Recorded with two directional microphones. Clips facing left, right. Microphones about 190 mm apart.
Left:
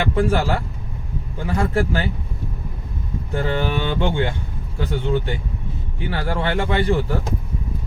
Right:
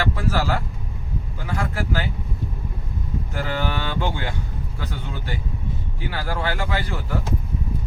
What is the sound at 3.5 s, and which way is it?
Speech, 20° left (ahead or behind).